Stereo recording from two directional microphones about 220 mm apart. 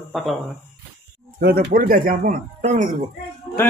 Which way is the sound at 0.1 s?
Centre (ahead or behind).